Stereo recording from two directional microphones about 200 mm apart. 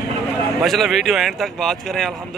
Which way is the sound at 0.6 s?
Centre (ahead or behind).